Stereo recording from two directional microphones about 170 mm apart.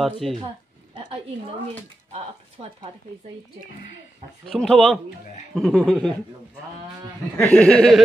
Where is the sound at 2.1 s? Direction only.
40° right (ahead or behind).